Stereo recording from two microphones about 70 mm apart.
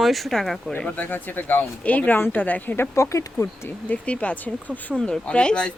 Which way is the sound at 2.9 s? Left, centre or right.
Left.